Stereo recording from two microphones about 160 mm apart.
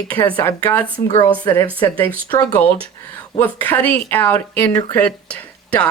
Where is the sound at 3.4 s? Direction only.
10° left (ahead or behind).